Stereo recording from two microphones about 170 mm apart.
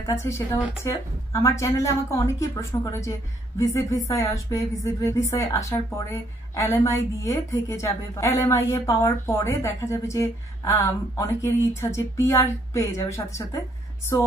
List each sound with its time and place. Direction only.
0.0 s speech: 15° left (ahead or behind)